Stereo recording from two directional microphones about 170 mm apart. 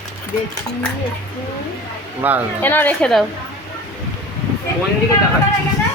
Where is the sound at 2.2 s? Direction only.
10° right (ahead or behind).